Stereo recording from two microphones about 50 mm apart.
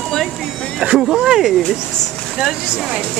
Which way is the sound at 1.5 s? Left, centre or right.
Centre.